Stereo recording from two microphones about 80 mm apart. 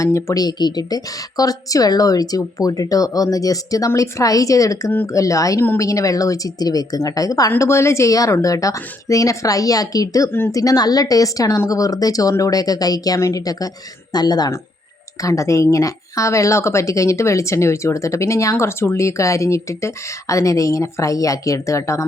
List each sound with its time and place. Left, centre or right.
0.0 s speech: left
0.3 s a woman's voice: left
5.5 s speech: left
5.8 s a woman's voice: left
7.6 s a woman's voice: left
10.2 s a woman's voice: left
10.5 s a woman's voice: left
15.2 s speech: left